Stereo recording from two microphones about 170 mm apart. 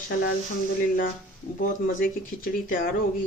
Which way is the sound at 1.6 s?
55° left (ahead or behind).